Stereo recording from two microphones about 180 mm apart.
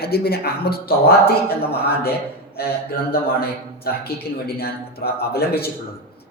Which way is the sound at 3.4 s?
60° left (ahead or behind).